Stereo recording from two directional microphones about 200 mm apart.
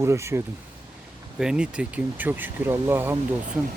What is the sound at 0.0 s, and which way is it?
Speech, 15° right (ahead or behind).